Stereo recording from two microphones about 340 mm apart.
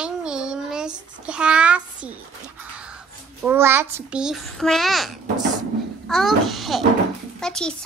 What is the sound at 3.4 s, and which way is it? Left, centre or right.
A child's voice, centre.